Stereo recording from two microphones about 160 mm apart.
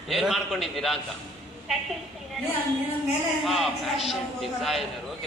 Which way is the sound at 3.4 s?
Centre (ahead or behind).